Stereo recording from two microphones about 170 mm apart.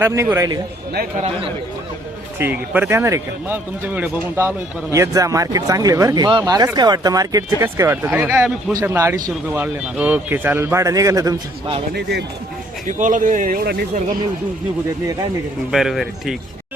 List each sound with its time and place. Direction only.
0.0 s speech: 15° right (ahead or behind)
2.4 s speech: 10° right (ahead or behind)
12.9 s speech: 50° right (ahead or behind)
15.7 s speech: centre (ahead or behind)